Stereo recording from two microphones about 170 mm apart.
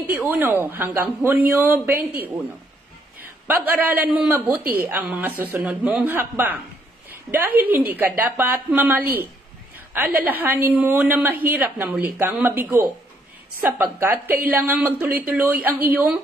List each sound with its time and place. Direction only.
0.0 s a man's voice: 10° right (ahead or behind)
7.1 s a sound: 10° right (ahead or behind)
7.6 s a man's voice: 10° right (ahead or behind)
14.0 s a man's voice: 10° right (ahead or behind)